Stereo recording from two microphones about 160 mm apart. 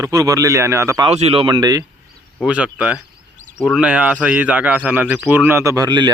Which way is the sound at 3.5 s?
5° left (ahead or behind).